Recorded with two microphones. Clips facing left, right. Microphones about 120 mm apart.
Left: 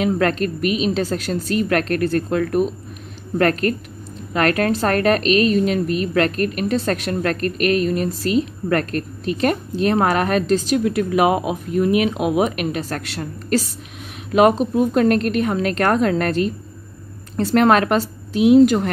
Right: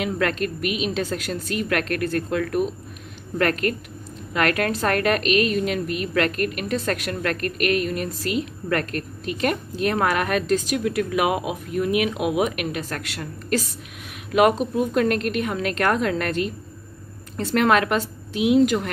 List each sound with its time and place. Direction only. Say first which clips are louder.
0.0 s a woman's voice: left 5 dB; 35° left (ahead or behind)